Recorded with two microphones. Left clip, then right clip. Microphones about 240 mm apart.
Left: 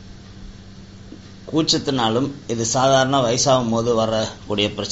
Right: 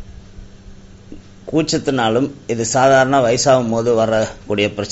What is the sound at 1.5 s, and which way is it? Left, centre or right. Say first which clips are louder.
A man's voice: right 2 dB; right.